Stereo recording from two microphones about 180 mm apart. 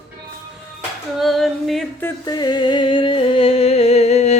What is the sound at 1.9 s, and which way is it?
Music, 15° left (ahead or behind).